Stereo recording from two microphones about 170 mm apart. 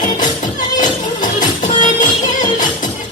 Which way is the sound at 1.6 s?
45° left (ahead or behind).